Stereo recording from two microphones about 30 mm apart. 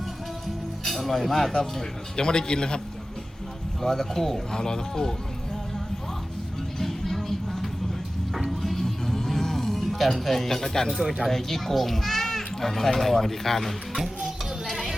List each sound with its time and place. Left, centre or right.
0.9 s speech: centre
2.1 s speech: left
3.8 s speech: centre
4.5 s speech: left
6.7 s music: centre
10.9 s speech: centre
11.3 s speech: centre